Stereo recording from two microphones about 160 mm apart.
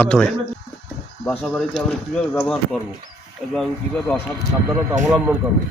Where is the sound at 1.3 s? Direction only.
10° left (ahead or behind).